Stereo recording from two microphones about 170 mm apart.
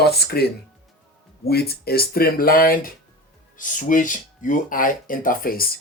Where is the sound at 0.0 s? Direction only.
70° left (ahead or behind).